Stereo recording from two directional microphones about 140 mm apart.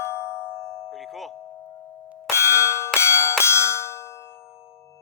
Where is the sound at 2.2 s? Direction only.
20° left (ahead or behind).